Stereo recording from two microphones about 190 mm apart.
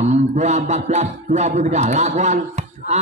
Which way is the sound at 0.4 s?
35° right (ahead or behind).